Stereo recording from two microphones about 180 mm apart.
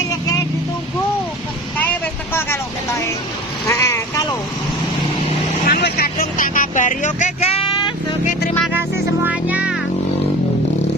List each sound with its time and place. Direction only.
3.7 s speech: 15° left (ahead or behind)
5.6 s vehicle: 60° left (ahead or behind); by 7.9 s 30° left (ahead or behind)
9.2 s speech: 10° right (ahead or behind)